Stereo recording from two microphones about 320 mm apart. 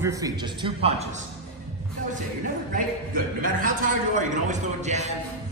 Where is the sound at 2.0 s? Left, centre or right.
Right.